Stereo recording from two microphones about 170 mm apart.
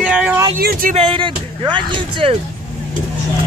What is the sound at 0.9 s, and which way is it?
Speech, 35° right (ahead or behind).